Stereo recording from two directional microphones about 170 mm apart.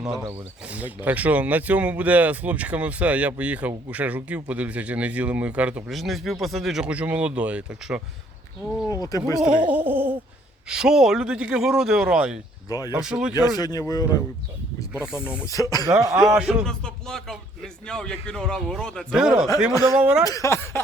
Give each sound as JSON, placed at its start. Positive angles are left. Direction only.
{"t": 0.3, "sound": "speech", "side_deg": -10}
{"t": 8.9, "sound": "speech", "side_deg": 20}
{"t": 9.6, "sound": "speech", "side_deg": -10}
{"t": 12.6, "sound": "speech", "side_deg": 20}
{"t": 13.0, "sound": "speech", "side_deg": -5}
{"t": 13.6, "sound": "speech", "side_deg": 20}
{"t": 15.1, "sound": "speech", "side_deg": -5}
{"t": 15.4, "sound": "speech", "side_deg": 20}
{"t": 16.0, "sound": "a man's voice", "side_deg": -20}
{"t": 16.2, "sound": "speech", "side_deg": -5}
{"t": 20.2, "sound": "speech", "side_deg": 20}